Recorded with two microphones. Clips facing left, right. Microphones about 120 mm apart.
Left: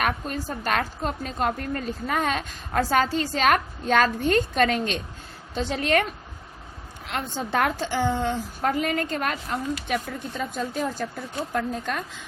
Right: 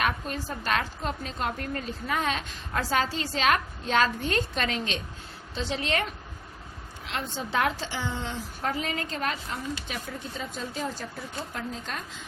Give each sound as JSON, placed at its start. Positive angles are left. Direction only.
{"t": 0.0, "sound": "a woman's voice", "side_deg": 45}
{"t": 7.1, "sound": "a woman's voice", "side_deg": 50}